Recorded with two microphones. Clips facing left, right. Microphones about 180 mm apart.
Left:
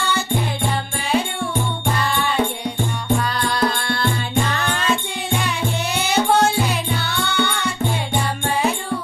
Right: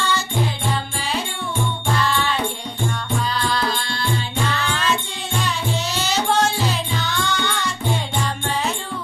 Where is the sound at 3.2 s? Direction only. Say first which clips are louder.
Left 2 dB; 60° left (ahead or behind).